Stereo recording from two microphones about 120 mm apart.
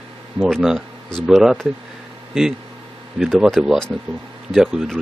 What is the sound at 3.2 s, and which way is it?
Speech, centre (ahead or behind).